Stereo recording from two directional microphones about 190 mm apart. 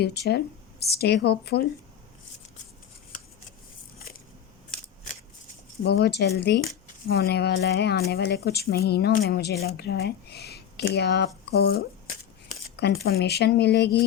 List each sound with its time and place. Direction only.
0.0 s speech: 60° left (ahead or behind)
5.8 s speech: 60° left (ahead or behind)